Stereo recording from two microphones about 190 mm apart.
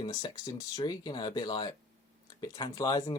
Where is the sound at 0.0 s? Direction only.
20° left (ahead or behind).